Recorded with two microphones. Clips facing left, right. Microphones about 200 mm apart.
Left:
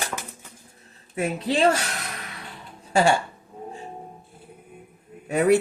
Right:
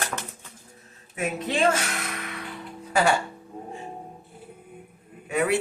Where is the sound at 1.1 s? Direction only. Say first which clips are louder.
Left 3 dB; 35° left (ahead or behind).